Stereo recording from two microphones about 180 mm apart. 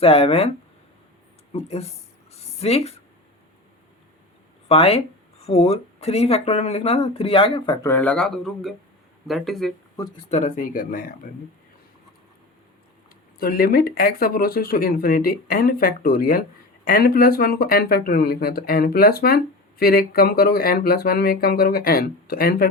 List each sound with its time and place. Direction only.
0.0 s speech: 35° left (ahead or behind)
1.5 s speech: 35° left (ahead or behind)
2.4 s a sound: 35° left (ahead or behind)
4.7 s speech: 30° left (ahead or behind)
7.9 s speech: 10° left (ahead or behind)
10.2 s speech: 40° left (ahead or behind)
13.4 s speech: 55° left (ahead or behind)